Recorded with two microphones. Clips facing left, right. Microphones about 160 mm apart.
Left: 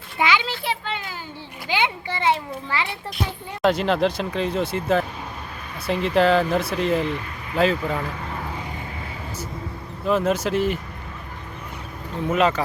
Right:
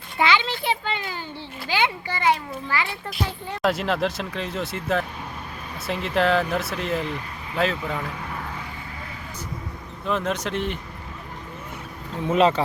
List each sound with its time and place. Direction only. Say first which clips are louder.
0.2 s children playing: even; 10° left (ahead or behind)
1.6 s a sound: even; 15° left (ahead or behind)
3.6 s speech: left 4 dB; centre (ahead or behind)
10.1 s speech: left 5 dB; 5° left (ahead or behind)
12.3 s speech: right 1 dB; 30° right (ahead or behind)